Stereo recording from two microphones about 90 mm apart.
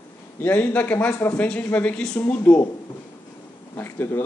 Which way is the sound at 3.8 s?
25° left (ahead or behind).